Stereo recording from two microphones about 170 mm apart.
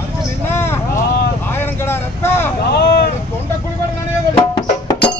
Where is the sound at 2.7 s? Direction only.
75° left (ahead or behind).